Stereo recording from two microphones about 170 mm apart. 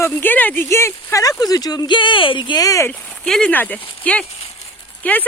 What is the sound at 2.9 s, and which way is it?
Speech, 10° left (ahead or behind).